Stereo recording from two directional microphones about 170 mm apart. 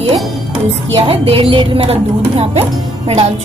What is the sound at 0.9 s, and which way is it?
Speech, 35° right (ahead or behind).